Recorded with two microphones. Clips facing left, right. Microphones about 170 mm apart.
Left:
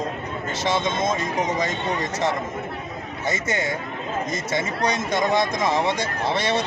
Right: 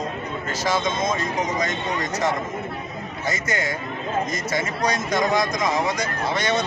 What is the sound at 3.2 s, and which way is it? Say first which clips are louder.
Speech: left 1 dB; 25° left (ahead or behind).